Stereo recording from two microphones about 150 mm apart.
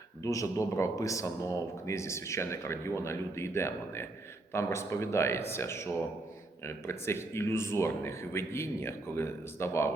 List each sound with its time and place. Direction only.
0.2 s speech: 20° left (ahead or behind)